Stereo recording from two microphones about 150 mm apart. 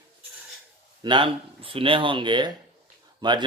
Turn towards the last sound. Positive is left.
turn(degrees=-30)  # may be behind; listen again after turning